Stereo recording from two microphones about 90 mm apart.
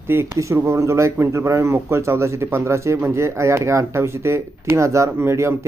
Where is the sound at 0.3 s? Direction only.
35° right (ahead or behind).